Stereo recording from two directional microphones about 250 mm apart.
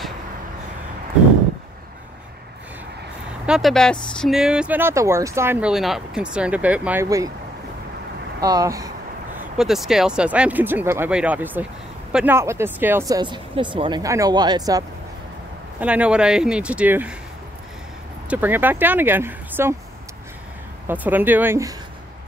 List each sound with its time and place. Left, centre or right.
3.4 s speech: centre
8.4 s speech: centre
9.6 s speech: centre
18.3 s speech: centre
20.8 s speech: centre